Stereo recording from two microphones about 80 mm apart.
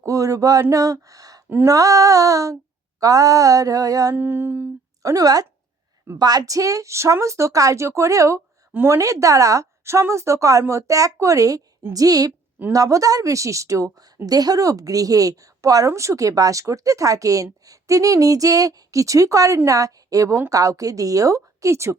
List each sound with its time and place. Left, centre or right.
0.0 s a woman's voice: right
4.1 s music: right
5.0 s a woman's voice: right
8.7 s a woman's voice: right
9.0 s a woman's voice: right